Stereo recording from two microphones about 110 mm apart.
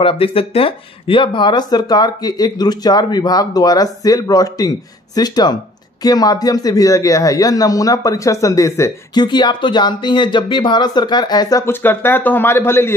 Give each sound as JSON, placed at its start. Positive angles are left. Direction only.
{"t": 0.0, "sound": "speech", "side_deg": 60}
{"t": 9.1, "sound": "speech", "side_deg": 40}
{"t": 11.6, "sound": "speech", "side_deg": 20}